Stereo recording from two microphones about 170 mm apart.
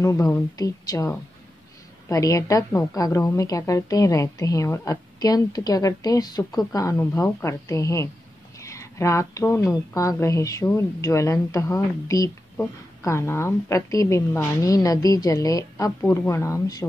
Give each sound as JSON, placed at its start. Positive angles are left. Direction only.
{"t": 0.0, "sound": "a woman's voice", "side_deg": 20}
{"t": 8.5, "sound": "a sound", "side_deg": 20}
{"t": 9.9, "sound": "a woman's voice", "side_deg": 15}